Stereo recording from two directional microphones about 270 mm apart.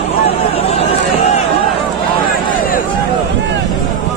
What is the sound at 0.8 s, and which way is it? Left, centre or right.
Vehicle, left.